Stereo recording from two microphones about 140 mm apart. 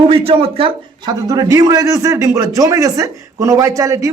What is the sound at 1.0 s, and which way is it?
A man's voice, 25° right (ahead or behind).